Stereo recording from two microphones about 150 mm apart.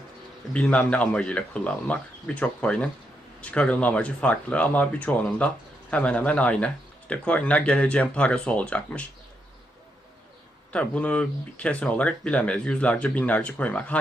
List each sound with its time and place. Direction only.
0.5 s speech: 10° left (ahead or behind)
10.7 s speech: 10° left (ahead or behind)